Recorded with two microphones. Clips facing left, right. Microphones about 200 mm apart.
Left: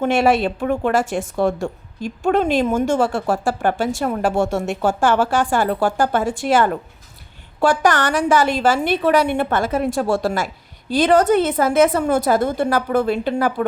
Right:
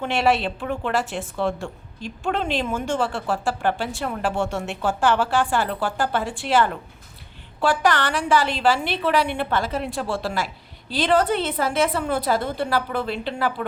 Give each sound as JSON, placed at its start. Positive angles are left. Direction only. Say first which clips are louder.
{"t": 0.0, "sound": "a woman's voice", "louder": "left 5 dB", "side_deg": 45}